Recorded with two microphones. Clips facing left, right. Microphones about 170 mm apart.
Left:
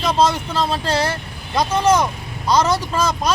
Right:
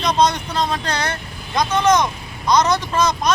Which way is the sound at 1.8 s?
5° left (ahead or behind).